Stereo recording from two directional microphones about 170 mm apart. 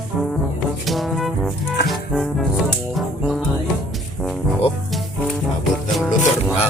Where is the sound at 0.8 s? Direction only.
Centre (ahead or behind).